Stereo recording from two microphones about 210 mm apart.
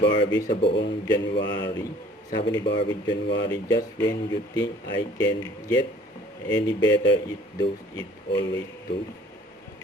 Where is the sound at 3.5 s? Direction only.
15° left (ahead or behind).